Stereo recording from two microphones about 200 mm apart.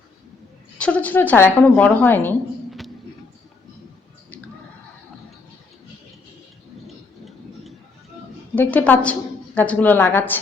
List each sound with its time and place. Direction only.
0.8 s a woman's voice: 5° left (ahead or behind)
6.8 s a sound: centre (ahead or behind)
8.5 s a woman's voice: 10° left (ahead or behind)